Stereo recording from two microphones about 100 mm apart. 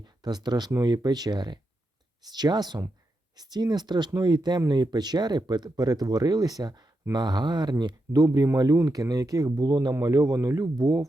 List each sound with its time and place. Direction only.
0.0 s speech: 45° right (ahead or behind)